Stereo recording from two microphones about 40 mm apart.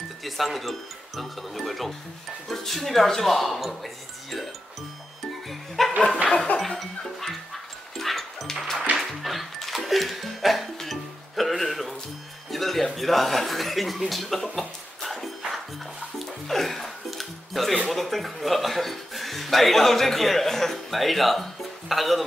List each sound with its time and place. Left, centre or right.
0.2 s speech: centre
5.5 s music: centre
6.3 s music: left
7.0 s music: centre
12.4 s speech: centre
16.3 s music: centre
17.8 s speech: centre